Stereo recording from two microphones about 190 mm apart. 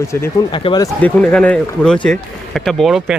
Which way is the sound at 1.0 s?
5° left (ahead or behind).